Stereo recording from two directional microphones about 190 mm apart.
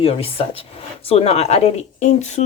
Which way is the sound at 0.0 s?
30° left (ahead or behind).